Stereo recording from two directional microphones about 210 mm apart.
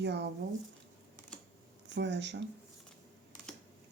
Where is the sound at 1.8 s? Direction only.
55° right (ahead or behind).